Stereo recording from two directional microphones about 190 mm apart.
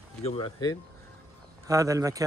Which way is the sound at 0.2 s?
30° left (ahead or behind).